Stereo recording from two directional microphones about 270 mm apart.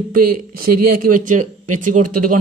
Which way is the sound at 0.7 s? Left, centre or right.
Right.